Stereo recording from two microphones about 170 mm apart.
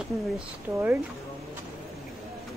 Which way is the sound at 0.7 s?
15° right (ahead or behind).